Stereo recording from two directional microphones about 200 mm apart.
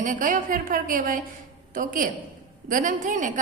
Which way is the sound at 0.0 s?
40° right (ahead or behind).